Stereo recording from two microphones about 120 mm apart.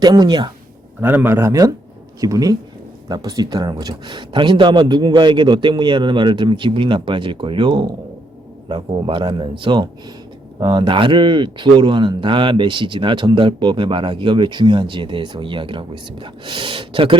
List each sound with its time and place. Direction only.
0.0 s speech: 35° right (ahead or behind)
1.0 s speech: 20° right (ahead or behind); by 17.2 s 45° right (ahead or behind)